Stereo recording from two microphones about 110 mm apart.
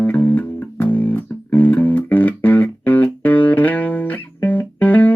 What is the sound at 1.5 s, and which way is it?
Music, 15° left (ahead or behind).